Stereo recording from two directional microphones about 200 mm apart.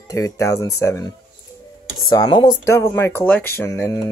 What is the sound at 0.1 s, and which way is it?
Speech, 15° left (ahead or behind).